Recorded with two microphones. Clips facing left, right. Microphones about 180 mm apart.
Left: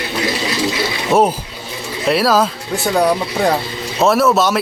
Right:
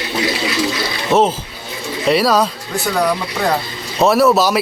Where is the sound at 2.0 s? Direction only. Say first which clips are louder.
Even; centre (ahead or behind).